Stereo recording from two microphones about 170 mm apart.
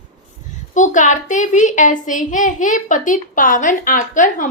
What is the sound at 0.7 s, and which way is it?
A woman's voice, 45° left (ahead or behind).